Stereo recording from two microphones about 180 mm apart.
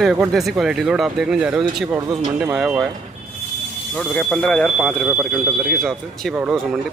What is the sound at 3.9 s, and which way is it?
Speech, 5° left (ahead or behind).